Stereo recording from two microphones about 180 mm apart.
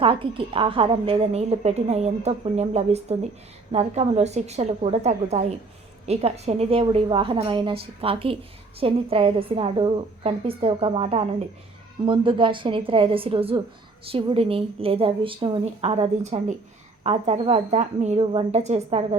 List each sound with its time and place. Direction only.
0.0 s a woman's voice: 30° right (ahead or behind)